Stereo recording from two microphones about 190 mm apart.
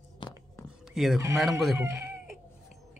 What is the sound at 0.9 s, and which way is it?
Speech, centre (ahead or behind).